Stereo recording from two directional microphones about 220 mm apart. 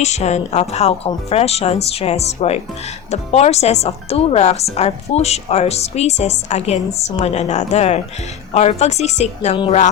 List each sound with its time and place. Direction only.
0.0 s speech: 30° left (ahead or behind)